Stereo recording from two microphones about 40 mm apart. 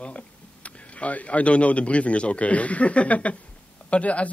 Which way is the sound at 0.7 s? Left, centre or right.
Left.